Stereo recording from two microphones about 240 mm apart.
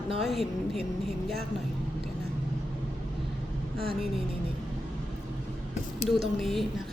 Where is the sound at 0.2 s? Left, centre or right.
Centre.